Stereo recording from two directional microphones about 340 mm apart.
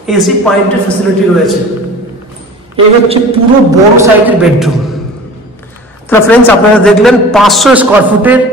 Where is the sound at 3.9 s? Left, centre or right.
Centre.